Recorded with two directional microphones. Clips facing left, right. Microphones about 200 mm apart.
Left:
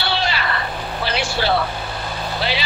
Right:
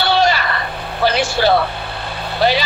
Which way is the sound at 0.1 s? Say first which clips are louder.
Right 10 dB; 45° right (ahead or behind).